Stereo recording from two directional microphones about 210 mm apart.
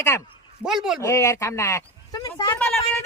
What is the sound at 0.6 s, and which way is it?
Speech, centre (ahead or behind).